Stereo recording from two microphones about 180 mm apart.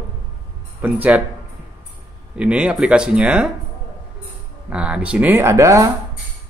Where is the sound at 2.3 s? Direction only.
5° right (ahead or behind).